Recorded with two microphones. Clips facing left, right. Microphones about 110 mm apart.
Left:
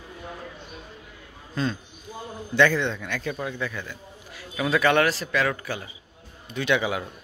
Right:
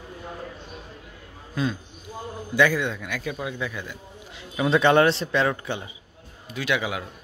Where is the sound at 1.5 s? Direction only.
5° right (ahead or behind); by 5.9 s 25° right (ahead or behind).